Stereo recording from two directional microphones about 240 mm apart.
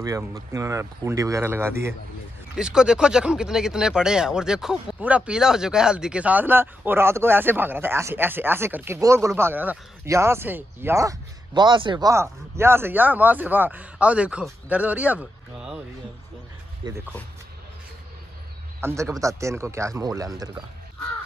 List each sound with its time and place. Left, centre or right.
0.0 s speech: centre
16.8 s speech: centre
18.8 s speech: centre